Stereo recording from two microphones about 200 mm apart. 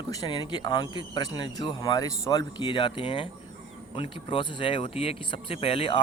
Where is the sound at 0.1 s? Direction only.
20° left (ahead or behind).